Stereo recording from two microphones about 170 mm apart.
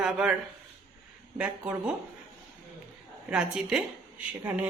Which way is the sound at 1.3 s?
5° right (ahead or behind).